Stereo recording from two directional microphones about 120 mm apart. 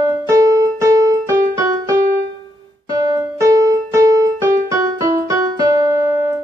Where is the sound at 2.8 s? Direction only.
25° right (ahead or behind).